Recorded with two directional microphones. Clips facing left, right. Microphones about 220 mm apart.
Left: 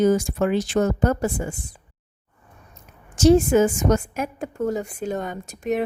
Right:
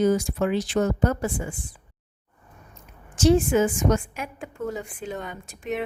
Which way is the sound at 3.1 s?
40° left (ahead or behind).